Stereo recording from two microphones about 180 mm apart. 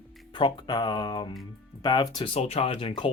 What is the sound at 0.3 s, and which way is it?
Speech, 25° left (ahead or behind).